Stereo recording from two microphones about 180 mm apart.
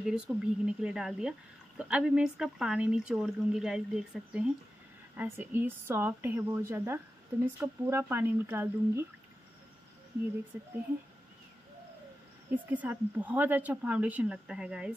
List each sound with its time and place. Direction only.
0.0 s a woman's voice: 5° right (ahead or behind)
10.5 s a woman's voice: 10° right (ahead or behind)
12.4 s a woman's voice: 10° right (ahead or behind)